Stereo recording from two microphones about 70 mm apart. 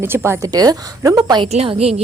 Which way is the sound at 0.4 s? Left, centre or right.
Right.